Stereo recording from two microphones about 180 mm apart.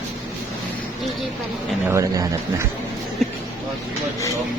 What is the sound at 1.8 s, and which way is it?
Speech, 15° right (ahead or behind).